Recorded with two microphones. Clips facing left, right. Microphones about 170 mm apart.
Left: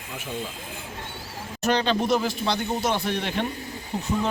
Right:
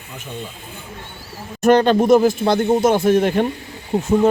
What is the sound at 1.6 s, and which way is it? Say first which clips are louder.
Speech: right 10 dB; 50° right (ahead or behind).